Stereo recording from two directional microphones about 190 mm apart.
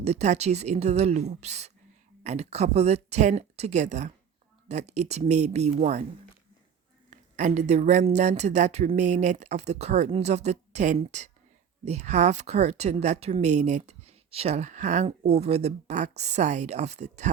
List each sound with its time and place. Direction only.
0.0 s speech: 35° right (ahead or behind)
7.1 s speech: 40° right (ahead or behind)